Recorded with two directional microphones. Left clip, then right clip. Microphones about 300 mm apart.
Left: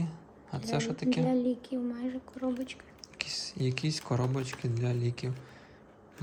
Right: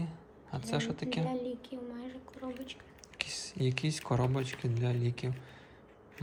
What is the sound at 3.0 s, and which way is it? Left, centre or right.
Speech, centre.